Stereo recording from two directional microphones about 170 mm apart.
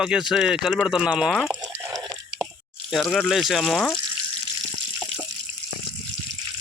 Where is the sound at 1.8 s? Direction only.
20° right (ahead or behind).